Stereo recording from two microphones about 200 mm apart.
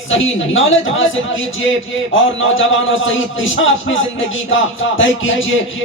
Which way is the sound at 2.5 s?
75° left (ahead or behind).